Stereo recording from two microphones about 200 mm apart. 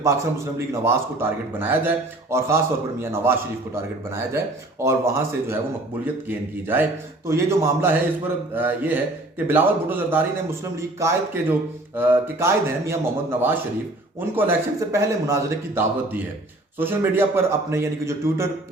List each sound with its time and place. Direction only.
0.0 s a man's voice: 15° right (ahead or behind)
14.2 s a man's voice: 10° right (ahead or behind)